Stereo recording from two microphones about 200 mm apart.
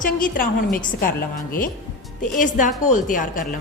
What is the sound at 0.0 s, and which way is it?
A woman's voice, 45° left (ahead or behind).